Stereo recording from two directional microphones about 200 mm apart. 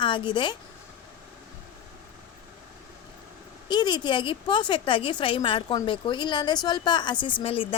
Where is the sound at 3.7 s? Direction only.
20° left (ahead or behind).